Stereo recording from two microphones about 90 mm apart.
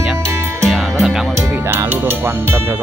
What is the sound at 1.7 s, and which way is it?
Speech, 25° right (ahead or behind).